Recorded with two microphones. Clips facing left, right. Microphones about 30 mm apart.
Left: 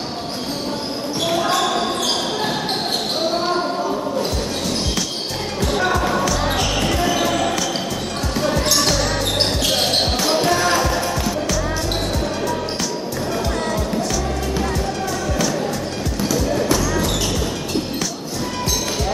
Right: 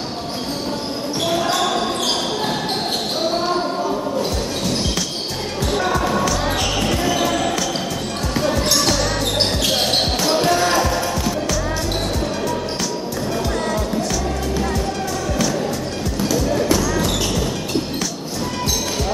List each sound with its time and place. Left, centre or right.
1.2 s basketball bounce: centre
5.7 s music: centre
6.1 s basketball bounce: centre
13.7 s music: centre
16.5 s basketball bounce: centre